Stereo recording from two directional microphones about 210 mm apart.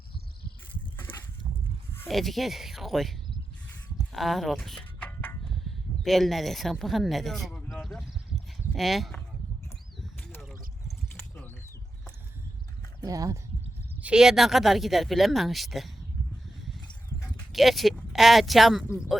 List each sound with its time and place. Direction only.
2.0 s speech: centre (ahead or behind)
4.1 s a sound: centre (ahead or behind)
6.0 s speech: centre (ahead or behind)
10.0 s bird: centre (ahead or behind)
13.0 s speech: 15° right (ahead or behind)
14.0 s speech: 5° right (ahead or behind)
17.5 s speech: centre (ahead or behind)